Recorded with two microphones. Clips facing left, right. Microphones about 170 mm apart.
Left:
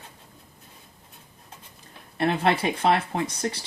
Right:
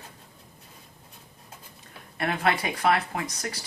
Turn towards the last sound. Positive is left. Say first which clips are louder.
# left 5 dB
turn(degrees=30)  # may be behind; listen again after turning